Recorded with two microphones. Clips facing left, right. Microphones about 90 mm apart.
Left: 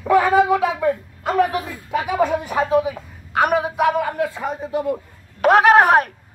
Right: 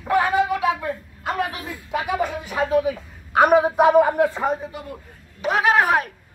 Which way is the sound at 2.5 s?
20° left (ahead or behind).